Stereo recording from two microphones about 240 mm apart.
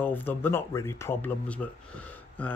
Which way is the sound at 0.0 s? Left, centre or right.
Centre.